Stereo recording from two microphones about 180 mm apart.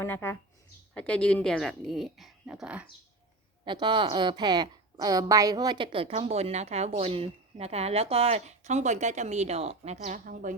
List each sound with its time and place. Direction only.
0.0 s speech: 10° left (ahead or behind); by 2.8 s 5° right (ahead or behind)
3.6 s a woman's voice: 25° right (ahead or behind); by 10.6 s 45° right (ahead or behind)